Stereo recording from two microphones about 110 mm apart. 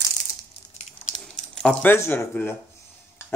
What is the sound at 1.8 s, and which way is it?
Speech, 20° left (ahead or behind).